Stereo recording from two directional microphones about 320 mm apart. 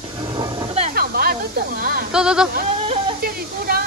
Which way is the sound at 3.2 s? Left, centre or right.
Right.